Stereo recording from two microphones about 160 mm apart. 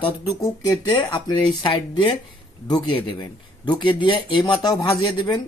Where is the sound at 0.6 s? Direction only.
20° left (ahead or behind).